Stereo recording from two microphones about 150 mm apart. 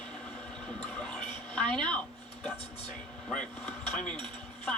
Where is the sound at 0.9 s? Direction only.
10° left (ahead or behind).